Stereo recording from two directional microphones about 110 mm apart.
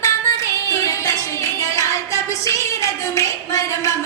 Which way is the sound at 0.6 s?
25° left (ahead or behind).